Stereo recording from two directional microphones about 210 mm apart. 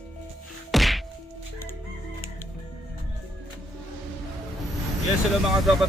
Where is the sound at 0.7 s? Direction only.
Centre (ahead or behind).